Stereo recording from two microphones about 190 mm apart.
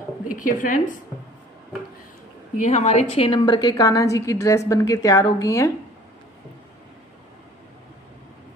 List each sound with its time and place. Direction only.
0.3 s a woman's voice: 45° left (ahead or behind)
2.6 s a woman's voice: 35° left (ahead or behind); by 5.7 s 15° left (ahead or behind)